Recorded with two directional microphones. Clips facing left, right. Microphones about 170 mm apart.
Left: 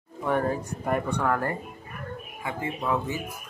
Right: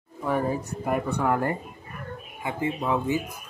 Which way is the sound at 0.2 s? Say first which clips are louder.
Even; 5° right (ahead or behind).